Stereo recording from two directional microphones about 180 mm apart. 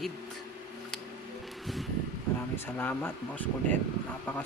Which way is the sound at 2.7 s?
10° left (ahead or behind).